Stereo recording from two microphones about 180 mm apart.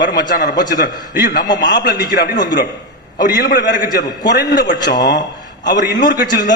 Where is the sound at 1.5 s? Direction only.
25° left (ahead or behind).